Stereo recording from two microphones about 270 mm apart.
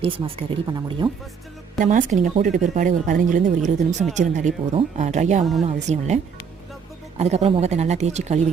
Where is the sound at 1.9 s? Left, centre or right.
Right.